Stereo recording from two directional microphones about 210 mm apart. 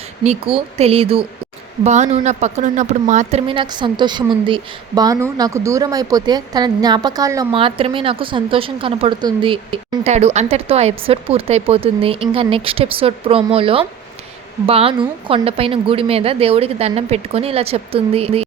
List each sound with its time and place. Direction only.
0.3 s speech: 30° right (ahead or behind)